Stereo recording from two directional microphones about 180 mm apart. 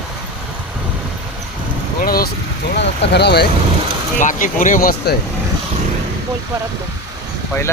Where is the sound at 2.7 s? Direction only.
65° left (ahead or behind).